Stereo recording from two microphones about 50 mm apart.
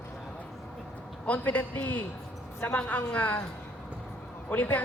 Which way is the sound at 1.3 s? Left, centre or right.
Left.